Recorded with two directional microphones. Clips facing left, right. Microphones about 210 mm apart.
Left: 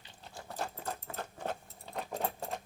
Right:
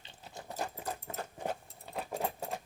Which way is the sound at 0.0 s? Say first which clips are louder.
Right 1 dB; 20° right (ahead or behind).